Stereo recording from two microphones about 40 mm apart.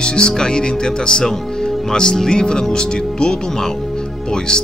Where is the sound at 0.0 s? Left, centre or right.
Left.